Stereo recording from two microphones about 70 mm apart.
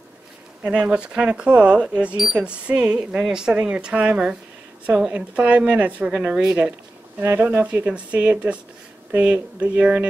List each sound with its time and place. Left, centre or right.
0.7 s speech: centre
7.2 s speech: right